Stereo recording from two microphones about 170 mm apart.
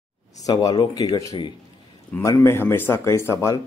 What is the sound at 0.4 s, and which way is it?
Speech, 20° left (ahead or behind).